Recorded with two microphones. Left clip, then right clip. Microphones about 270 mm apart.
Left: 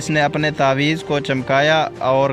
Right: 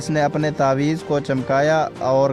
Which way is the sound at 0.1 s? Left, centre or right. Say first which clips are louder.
Left 2 dB; centre.